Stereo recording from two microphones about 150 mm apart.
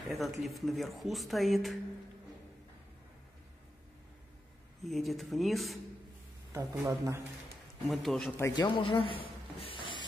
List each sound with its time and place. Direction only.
0.0 s speech: centre (ahead or behind)
4.8 s speech: centre (ahead or behind)
6.8 s speech: 20° right (ahead or behind)
7.9 s speech: centre (ahead or behind)
8.4 s speech: 20° left (ahead or behind)
8.6 s a sound: 35° left (ahead or behind)